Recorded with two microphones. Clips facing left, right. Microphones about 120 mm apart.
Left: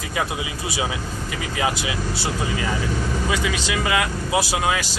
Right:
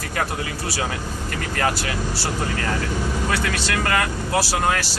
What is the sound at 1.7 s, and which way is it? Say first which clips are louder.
Speech: even; 15° left (ahead or behind).